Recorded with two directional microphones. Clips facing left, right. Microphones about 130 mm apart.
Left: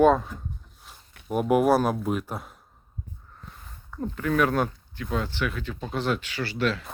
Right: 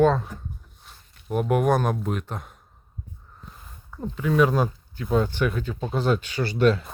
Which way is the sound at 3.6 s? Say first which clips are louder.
Left 1 dB; 10° right (ahead or behind).